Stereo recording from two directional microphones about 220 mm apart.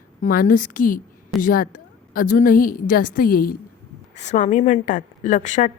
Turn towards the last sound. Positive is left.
turn(degrees=35)  # may be behind; listen again after turning